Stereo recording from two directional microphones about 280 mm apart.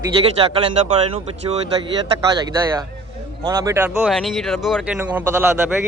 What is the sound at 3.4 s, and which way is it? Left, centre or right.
Speech, centre.